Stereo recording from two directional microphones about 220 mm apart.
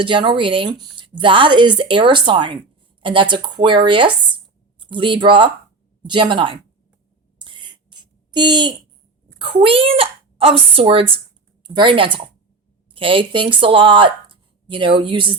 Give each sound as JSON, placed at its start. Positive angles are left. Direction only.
{"t": 0.0, "sound": "speech", "side_deg": -20}
{"t": 7.3, "sound": "a sound", "side_deg": -20}
{"t": 9.4, "sound": "speech", "side_deg": -25}